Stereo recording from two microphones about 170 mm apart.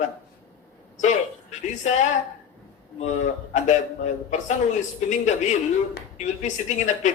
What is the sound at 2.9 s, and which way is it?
Speech, 45° left (ahead or behind).